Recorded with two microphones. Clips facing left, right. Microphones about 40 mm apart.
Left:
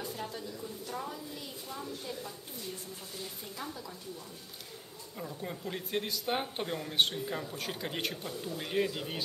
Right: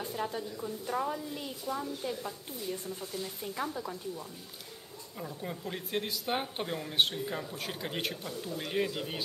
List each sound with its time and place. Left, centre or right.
0.0 s a woman's voice: right
3.5 s a woman's voice: right
5.2 s speech: centre